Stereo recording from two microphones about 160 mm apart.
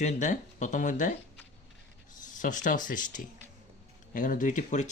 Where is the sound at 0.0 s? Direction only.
50° left (ahead or behind).